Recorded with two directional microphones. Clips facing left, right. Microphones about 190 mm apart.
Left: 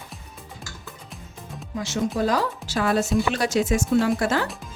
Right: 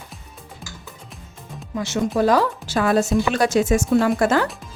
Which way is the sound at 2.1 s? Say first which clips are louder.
Right 8 dB; 60° right (ahead or behind).